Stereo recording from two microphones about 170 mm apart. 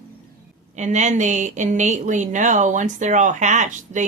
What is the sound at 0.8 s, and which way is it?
A woman's voice, 45° right (ahead or behind).